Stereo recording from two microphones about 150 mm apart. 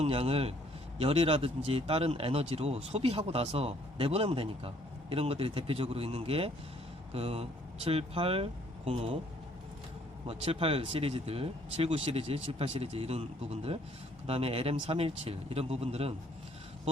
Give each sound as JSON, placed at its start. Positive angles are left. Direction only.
{"t": 0.0, "sound": "speech", "side_deg": -40}
{"t": 10.2, "sound": "speech", "side_deg": -40}